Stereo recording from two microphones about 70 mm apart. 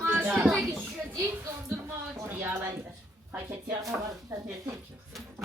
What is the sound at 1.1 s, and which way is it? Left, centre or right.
Speech, right.